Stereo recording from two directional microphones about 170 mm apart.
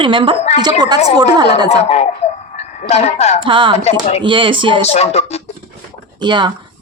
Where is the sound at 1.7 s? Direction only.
40° left (ahead or behind).